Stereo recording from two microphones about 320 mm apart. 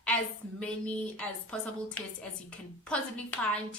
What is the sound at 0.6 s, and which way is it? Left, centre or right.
A woman's voice, centre.